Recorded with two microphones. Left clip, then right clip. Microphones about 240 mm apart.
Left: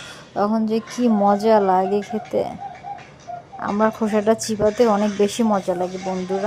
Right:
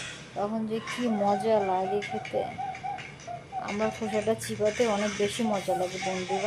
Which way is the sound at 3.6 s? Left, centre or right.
Left.